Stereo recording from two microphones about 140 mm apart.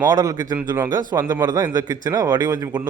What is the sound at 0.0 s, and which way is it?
A man's voice, 25° right (ahead or behind).